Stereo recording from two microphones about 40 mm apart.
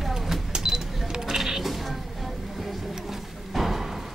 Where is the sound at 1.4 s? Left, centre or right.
Centre.